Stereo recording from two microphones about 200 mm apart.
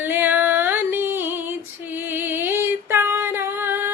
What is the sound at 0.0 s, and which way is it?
Female singing, 10° right (ahead or behind).